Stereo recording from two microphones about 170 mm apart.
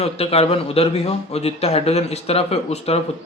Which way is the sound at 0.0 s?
35° left (ahead or behind).